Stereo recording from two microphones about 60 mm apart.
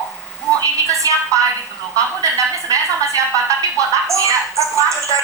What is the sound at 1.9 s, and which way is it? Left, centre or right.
A woman's voice, right.